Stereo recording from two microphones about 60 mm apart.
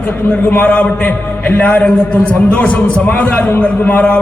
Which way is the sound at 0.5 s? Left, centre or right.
Left.